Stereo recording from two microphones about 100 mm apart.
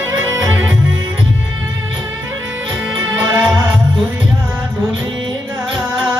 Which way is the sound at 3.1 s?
20° right (ahead or behind).